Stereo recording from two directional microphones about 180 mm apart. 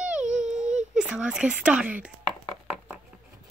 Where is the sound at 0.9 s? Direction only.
5° right (ahead or behind).